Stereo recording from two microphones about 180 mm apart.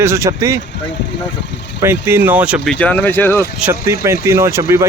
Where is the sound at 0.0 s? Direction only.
15° right (ahead or behind).